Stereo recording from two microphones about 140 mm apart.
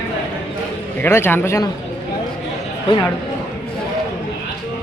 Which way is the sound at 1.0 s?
15° left (ahead or behind).